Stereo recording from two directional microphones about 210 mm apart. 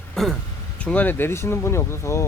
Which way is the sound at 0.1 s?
Centre (ahead or behind).